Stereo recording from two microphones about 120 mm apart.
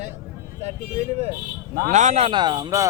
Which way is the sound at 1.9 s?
85° right.